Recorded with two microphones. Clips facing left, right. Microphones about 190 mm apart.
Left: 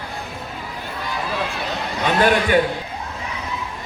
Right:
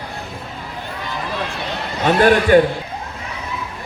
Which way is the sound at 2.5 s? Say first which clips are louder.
Right 8 dB; 45° right (ahead or behind).